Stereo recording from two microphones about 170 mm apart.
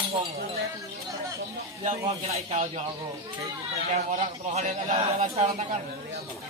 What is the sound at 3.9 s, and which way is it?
A man's voice, 45° right (ahead or behind).